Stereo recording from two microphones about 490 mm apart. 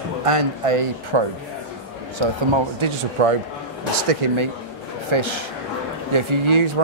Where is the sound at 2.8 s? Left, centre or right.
Right.